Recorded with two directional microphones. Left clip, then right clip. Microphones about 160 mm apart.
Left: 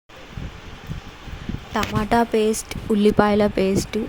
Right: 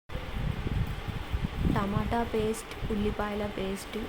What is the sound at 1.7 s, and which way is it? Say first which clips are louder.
Speech: left 12 dB; 50° left (ahead or behind).